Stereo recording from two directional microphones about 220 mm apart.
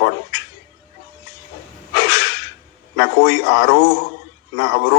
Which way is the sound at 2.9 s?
50° left (ahead or behind).